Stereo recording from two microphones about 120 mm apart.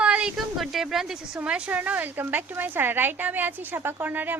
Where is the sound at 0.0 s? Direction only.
10° right (ahead or behind).